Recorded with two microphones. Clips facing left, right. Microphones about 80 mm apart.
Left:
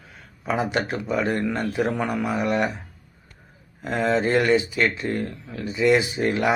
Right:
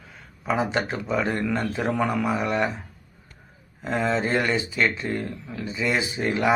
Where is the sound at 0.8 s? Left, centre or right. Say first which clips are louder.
Left 1 dB; right.